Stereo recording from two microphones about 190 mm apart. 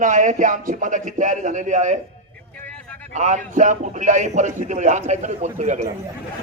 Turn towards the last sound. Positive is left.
turn(degrees=-40)  # may be behind; listen again after turning